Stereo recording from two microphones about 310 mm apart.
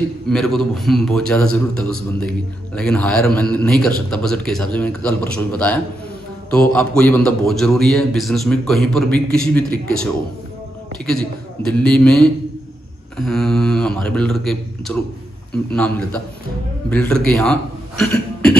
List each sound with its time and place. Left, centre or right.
0.3 s a man's voice: centre
11.1 s a man's voice: centre
13.2 s a man's voice: centre